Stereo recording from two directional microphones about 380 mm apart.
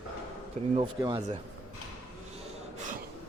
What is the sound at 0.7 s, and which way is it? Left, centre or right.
Speech, centre.